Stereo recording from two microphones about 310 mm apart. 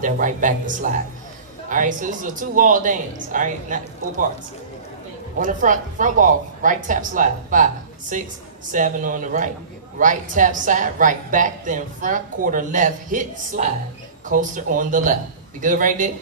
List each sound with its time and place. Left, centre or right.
0.0 s a woman's voice: right
5.4 s a woman's voice: right